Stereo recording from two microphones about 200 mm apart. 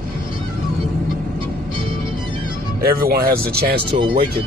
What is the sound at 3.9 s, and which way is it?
Speech, 20° right (ahead or behind).